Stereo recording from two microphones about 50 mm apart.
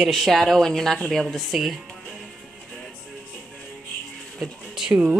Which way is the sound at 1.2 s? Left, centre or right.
Centre.